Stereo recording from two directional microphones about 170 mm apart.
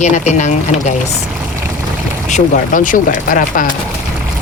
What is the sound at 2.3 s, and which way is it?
Speech, 45° left (ahead or behind).